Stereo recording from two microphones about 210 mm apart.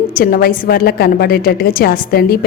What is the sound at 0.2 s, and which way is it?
A woman's voice, 45° left (ahead or behind).